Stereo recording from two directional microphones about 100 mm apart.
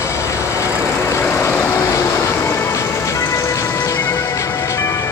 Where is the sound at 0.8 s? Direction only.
25° left (ahead or behind).